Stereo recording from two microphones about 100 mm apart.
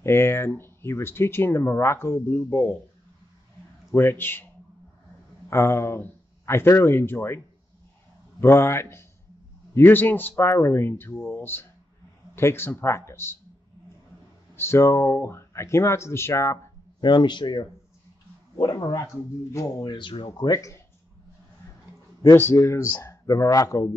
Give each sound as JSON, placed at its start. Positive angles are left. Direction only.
{"t": 0.0, "sound": "speech", "side_deg": 25}
{"t": 3.9, "sound": "speech", "side_deg": 20}
{"t": 5.5, "sound": "speech", "side_deg": 25}
{"t": 14.5, "sound": "speech", "side_deg": 25}
{"t": 17.0, "sound": "speech", "side_deg": 50}
{"t": 19.9, "sound": "speech", "side_deg": 55}
{"t": 20.4, "sound": "speech", "side_deg": 35}
{"t": 22.2, "sound": "speech", "side_deg": 25}